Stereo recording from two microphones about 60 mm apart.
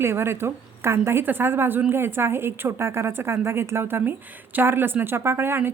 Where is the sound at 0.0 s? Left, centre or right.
Right.